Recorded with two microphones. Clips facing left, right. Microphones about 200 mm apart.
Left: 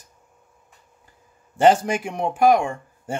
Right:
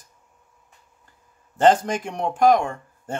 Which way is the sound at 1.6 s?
10° left (ahead or behind).